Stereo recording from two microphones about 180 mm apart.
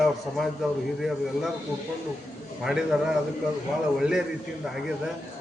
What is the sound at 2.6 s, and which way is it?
A man's voice, 5° right (ahead or behind).